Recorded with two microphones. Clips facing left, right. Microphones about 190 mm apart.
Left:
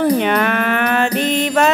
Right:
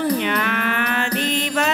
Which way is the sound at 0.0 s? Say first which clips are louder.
Left 6 dB; 50° left (ahead or behind).